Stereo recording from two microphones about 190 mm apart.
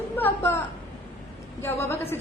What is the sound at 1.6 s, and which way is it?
Speech, 15° left (ahead or behind).